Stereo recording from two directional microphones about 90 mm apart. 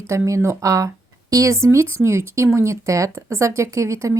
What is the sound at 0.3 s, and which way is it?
Speech, 35° right (ahead or behind).